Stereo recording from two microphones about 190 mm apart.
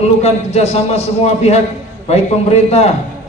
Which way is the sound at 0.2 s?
35° left (ahead or behind).